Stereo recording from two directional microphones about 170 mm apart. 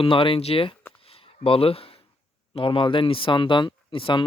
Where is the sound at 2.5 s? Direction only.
30° left (ahead or behind).